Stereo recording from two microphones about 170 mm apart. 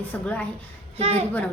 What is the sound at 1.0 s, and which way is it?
Speech, 35° right (ahead or behind).